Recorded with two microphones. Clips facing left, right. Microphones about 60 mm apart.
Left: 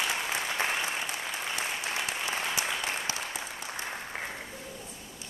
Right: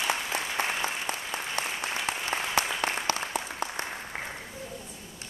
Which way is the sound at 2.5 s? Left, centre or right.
Right.